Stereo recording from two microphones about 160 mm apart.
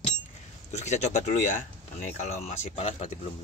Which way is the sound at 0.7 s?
45° left (ahead or behind).